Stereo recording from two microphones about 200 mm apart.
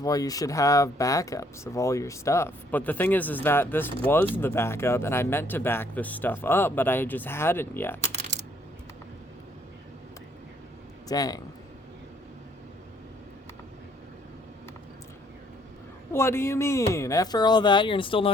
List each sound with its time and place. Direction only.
0.0 s speech: 15° left (ahead or behind)
8.1 s coin: 35° right (ahead or behind)
11.1 s speech: 20° left (ahead or behind)
16.1 s speech: 10° left (ahead or behind)